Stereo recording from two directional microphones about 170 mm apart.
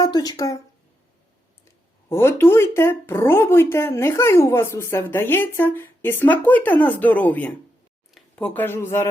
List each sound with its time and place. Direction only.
0.0 s speech: 20° left (ahead or behind)
1.6 s speech: 15° left (ahead or behind)